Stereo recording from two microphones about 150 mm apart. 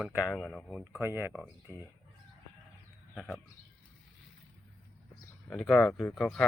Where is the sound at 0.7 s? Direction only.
10° right (ahead or behind).